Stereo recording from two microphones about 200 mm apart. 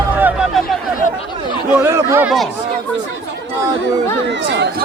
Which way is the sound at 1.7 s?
10° right (ahead or behind).